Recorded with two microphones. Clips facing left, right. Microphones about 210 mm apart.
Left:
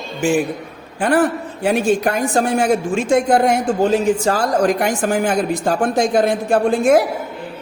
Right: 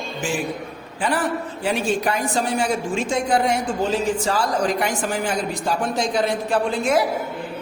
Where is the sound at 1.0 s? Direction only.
55° left (ahead or behind).